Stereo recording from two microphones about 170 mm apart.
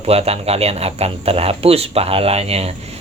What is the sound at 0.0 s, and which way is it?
Speech, 35° right (ahead or behind).